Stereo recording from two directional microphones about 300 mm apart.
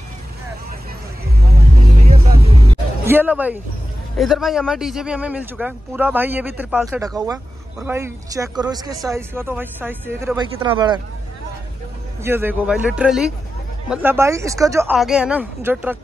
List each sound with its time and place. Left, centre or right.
1.5 s vehicle: right
3.1 s a man's voice: centre
12.2 s a man's voice: centre